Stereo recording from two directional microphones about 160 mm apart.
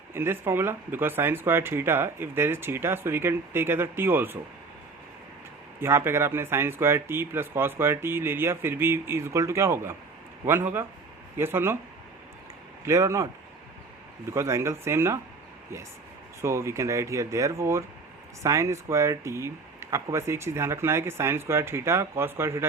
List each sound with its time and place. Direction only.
0.1 s speech: 15° right (ahead or behind)
5.8 s speech: 15° right (ahead or behind)
12.8 s speech: 20° right (ahead or behind)
14.3 s speech: 15° right (ahead or behind)
16.4 s speech: 15° right (ahead or behind)